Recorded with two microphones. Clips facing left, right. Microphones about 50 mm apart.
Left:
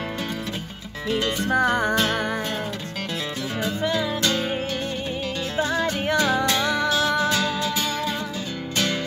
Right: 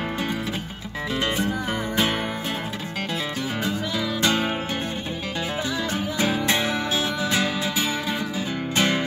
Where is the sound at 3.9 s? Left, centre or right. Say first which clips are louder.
Even; centre.